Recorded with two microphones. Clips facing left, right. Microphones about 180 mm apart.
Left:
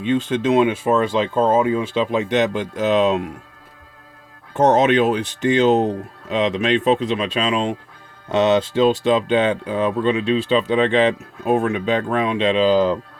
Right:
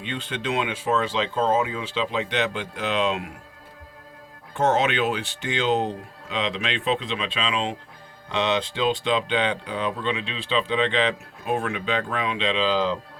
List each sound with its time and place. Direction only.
0.0 s speech: 45° left (ahead or behind)
4.5 s speech: 40° left (ahead or behind)